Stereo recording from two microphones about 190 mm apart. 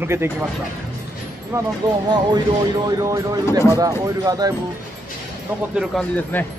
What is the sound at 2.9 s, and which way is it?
Speech, 15° right (ahead or behind).